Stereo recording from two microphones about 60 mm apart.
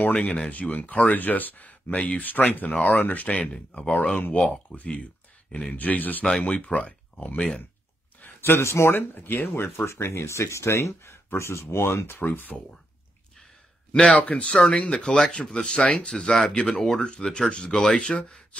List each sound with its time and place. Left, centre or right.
0.0 s speech: left
8.5 s speech: left
12.2 s speech: left
13.9 s speech: left